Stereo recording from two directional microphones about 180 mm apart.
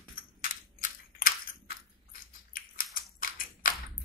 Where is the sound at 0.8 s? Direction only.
50° left (ahead or behind).